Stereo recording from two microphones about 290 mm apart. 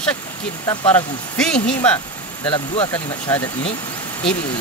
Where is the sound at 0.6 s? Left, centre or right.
Centre.